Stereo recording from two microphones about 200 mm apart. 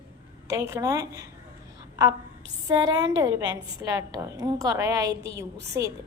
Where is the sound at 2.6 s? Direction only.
20° right (ahead or behind).